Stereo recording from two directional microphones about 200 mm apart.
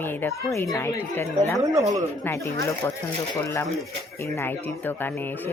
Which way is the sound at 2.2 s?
15° left (ahead or behind).